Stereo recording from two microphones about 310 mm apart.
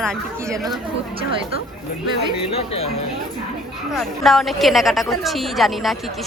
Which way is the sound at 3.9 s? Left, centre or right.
Centre.